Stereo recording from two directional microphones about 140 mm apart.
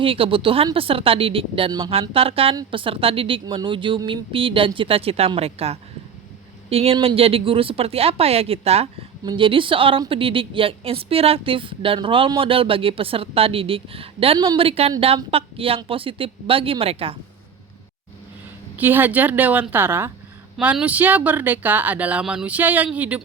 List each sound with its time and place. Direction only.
0.0 s a woman's voice: 40° right (ahead or behind)
9.2 s a woman's voice: 35° right (ahead or behind)
18.8 s speech: 15° right (ahead or behind)